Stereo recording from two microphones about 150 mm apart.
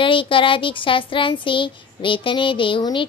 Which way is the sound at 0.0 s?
35° left (ahead or behind).